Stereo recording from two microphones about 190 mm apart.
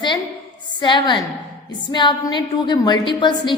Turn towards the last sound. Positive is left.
turn(degrees=25)  # may be behind; listen again after turning